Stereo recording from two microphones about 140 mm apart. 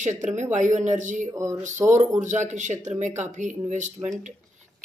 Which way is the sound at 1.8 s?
10° right (ahead or behind).